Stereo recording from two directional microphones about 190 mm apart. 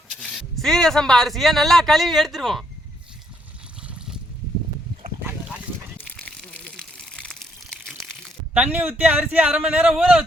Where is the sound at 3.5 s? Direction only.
5° right (ahead or behind).